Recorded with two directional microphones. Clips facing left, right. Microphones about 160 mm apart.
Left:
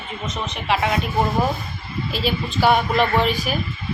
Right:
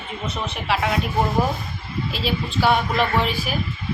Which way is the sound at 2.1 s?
Centre (ahead or behind).